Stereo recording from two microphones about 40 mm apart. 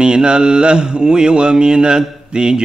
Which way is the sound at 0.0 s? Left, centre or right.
Right.